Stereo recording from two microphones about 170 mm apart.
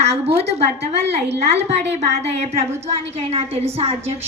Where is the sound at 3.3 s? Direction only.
40° right (ahead or behind).